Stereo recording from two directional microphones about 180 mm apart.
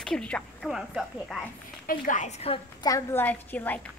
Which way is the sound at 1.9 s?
45° left (ahead or behind).